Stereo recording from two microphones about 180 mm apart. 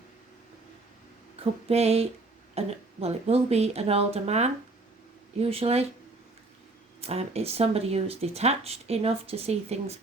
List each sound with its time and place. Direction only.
1.6 s speech: 35° right (ahead or behind)
7.0 s speech: 35° right (ahead or behind)